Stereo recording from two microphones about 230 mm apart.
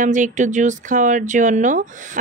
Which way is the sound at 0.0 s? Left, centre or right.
Right.